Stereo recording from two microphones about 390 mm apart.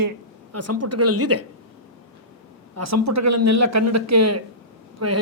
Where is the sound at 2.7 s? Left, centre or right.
Right.